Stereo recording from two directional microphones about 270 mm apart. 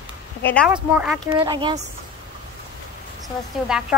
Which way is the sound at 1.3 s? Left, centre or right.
Centre.